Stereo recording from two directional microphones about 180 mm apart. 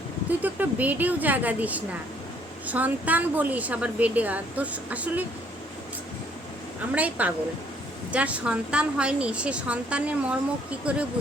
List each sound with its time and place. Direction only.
0.3 s a woman's voice: 10° right (ahead or behind)
6.9 s a woman's voice: 10° right (ahead or behind)